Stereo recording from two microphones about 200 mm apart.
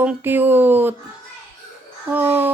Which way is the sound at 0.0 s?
10° right (ahead or behind).